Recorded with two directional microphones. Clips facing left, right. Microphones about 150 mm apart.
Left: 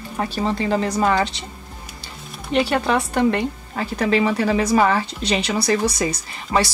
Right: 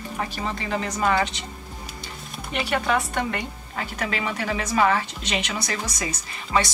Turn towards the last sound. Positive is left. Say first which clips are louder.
# left 3 dB
turn(degrees=35)  # may be behind; listen again after turning